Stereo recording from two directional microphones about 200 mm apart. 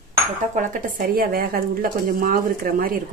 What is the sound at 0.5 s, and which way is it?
A woman's voice, 45° right (ahead or behind).